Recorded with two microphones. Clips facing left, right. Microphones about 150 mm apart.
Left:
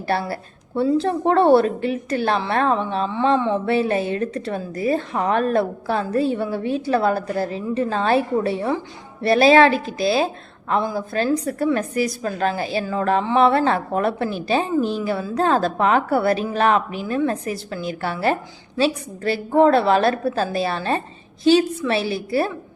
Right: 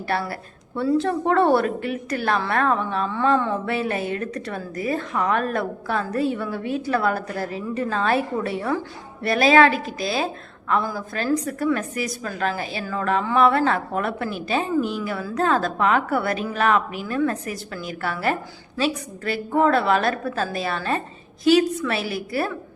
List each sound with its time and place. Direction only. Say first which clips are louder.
0.1 s a woman's voice: left 3 dB; 30° left (ahead or behind)